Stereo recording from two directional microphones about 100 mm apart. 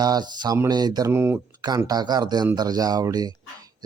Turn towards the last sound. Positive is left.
turn(degrees=-40)  # may be behind; listen again after turning